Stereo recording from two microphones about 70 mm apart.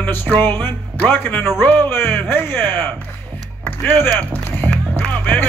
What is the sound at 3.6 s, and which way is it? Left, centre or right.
Music, left.